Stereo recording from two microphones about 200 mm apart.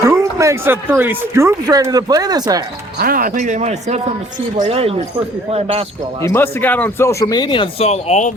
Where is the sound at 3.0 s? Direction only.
45° right (ahead or behind).